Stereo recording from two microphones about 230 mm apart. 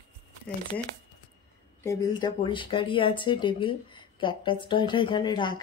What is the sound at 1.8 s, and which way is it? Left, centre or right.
Speech, centre.